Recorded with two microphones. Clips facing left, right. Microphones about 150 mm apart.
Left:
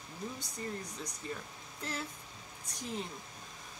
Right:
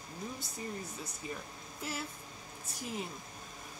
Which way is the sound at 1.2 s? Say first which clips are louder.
Right 1 dB; 10° right (ahead or behind).